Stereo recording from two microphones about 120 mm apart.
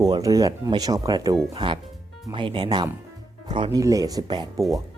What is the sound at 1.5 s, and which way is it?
Speech, 45° right (ahead or behind).